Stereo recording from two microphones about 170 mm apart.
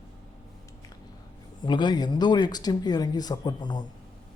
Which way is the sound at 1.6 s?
25° left (ahead or behind).